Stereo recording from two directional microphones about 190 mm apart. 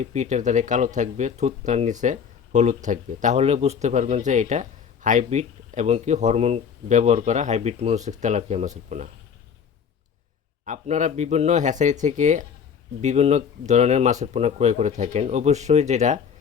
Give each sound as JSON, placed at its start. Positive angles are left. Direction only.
{"t": 0.0, "sound": "speech", "side_deg": -35}
{"t": 10.7, "sound": "speech", "side_deg": -40}